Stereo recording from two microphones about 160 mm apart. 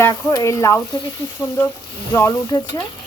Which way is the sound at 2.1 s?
15° left (ahead or behind).